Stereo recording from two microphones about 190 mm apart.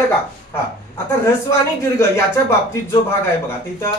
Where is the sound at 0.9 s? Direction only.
15° left (ahead or behind).